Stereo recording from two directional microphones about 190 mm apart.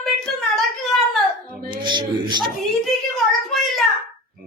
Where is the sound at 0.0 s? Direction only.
Centre (ahead or behind).